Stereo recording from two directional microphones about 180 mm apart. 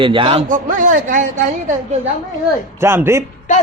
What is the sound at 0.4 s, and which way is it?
Speech, 45° right (ahead or behind).